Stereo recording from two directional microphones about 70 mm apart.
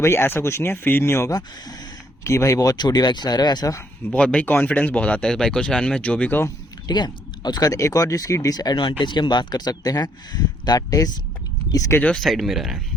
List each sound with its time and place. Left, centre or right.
0.0 s speech: left
1.3 s speech: left
2.2 s speech: left
4.1 s speech: centre
4.4 s speech: left
6.8 s speech: left
7.7 s speech: left
12.1 s speech: centre